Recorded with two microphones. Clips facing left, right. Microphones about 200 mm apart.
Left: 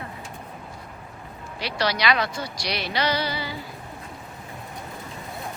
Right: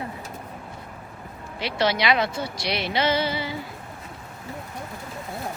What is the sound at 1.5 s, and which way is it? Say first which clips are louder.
Speech: right 3 dB; 25° right (ahead or behind).